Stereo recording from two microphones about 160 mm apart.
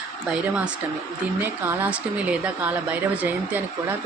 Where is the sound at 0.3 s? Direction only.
5° right (ahead or behind).